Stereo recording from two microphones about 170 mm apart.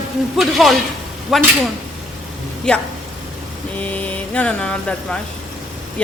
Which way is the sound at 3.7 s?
10° left (ahead or behind).